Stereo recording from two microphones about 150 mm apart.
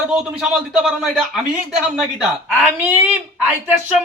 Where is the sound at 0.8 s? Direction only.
5° right (ahead or behind).